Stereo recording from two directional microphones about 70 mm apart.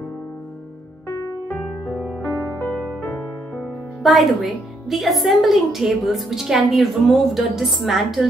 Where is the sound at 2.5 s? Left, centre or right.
Left.